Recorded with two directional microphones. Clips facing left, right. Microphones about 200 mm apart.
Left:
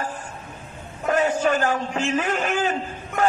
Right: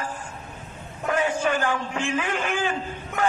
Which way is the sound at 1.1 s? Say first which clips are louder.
Left 3 dB; 40° left (ahead or behind).